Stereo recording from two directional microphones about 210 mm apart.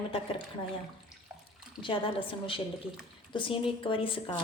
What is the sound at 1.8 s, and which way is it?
A woman's voice, 25° left (ahead or behind).